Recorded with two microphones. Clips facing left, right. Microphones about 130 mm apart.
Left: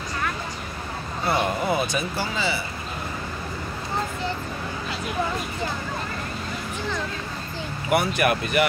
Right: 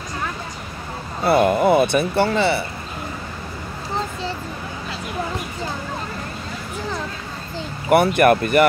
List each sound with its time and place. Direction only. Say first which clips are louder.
1.2 s speech: right 8 dB; 60° right (ahead or behind)
7.9 s speech: right 7 dB; 55° right (ahead or behind)